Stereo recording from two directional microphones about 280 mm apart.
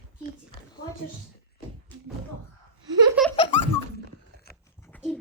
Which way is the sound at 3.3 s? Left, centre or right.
Centre.